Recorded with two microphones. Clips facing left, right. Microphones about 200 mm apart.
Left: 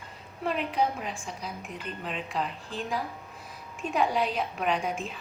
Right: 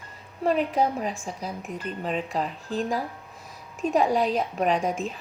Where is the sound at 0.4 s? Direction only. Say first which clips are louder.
Right 5 dB; 40° right (ahead or behind).